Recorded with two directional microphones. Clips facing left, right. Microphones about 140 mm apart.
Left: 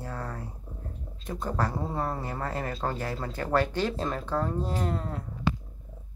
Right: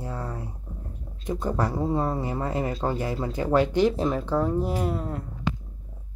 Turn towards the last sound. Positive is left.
turn(degrees=-5)  # may be behind; listen again after turning